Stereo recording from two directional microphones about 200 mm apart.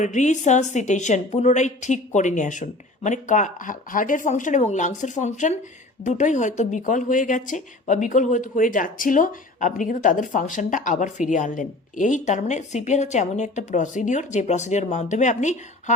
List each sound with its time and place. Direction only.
0.0 s speech: 35° left (ahead or behind)